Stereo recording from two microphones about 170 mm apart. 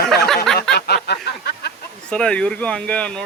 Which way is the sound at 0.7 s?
75° left (ahead or behind).